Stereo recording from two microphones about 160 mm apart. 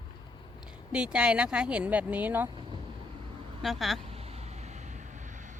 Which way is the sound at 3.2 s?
35° right (ahead or behind).